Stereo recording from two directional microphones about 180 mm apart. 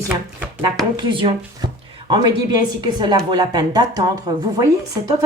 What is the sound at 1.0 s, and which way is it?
A woman's voice, 30° right (ahead or behind).